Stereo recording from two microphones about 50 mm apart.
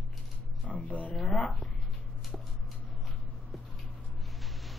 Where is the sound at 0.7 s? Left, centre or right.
Left.